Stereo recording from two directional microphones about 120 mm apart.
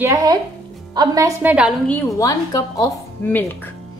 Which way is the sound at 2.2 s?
30° left (ahead or behind).